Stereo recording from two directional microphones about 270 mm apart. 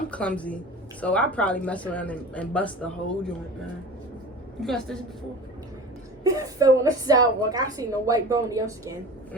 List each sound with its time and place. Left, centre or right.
0.1 s speech: centre
4.6 s speech: centre
6.2 s a woman's voice: centre